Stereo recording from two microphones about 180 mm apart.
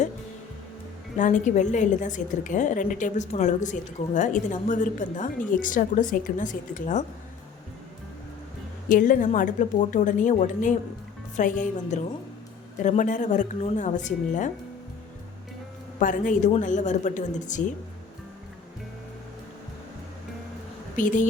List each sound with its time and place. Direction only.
1.1 s a woman's voice: 45° left (ahead or behind)
8.9 s a woman's voice: 45° left (ahead or behind)
16.0 s a woman's voice: 45° left (ahead or behind)
20.9 s a woman's voice: 45° left (ahead or behind)